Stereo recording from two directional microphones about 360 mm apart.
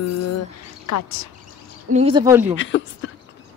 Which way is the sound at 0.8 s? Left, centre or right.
Left.